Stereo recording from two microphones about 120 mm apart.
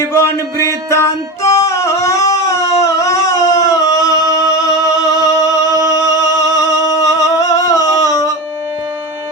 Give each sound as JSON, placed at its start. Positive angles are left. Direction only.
{"t": 0.1, "sound": "music", "side_deg": 25}